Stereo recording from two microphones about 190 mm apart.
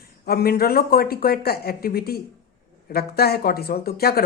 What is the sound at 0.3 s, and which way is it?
Speech, 55° left (ahead or behind).